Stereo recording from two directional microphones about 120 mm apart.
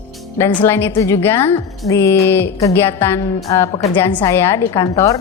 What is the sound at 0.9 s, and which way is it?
A woman's voice, 25° left (ahead or behind).